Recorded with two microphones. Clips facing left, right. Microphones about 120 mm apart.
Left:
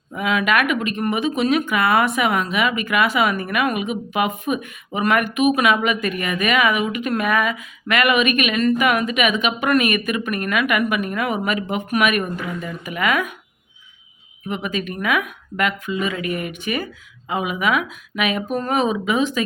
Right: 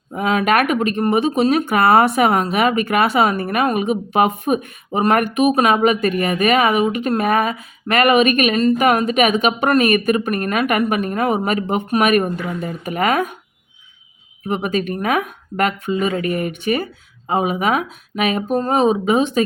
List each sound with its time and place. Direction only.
0.1 s speech: 40° right (ahead or behind)
14.4 s speech: 40° right (ahead or behind)